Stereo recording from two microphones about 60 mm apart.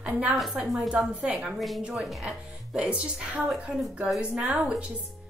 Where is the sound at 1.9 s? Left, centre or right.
Centre.